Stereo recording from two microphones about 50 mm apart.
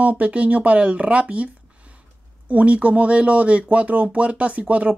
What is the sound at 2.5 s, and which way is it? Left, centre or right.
Speech, right.